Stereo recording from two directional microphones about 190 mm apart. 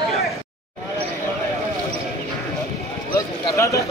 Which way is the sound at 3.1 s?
15° left (ahead or behind).